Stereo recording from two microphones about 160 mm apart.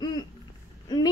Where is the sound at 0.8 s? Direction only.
25° left (ahead or behind).